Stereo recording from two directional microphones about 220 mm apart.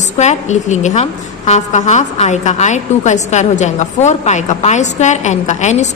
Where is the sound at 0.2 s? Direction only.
30° left (ahead or behind).